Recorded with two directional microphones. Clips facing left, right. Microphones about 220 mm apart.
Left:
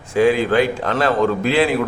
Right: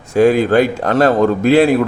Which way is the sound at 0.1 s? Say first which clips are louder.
Right 4 dB; 45° right (ahead or behind).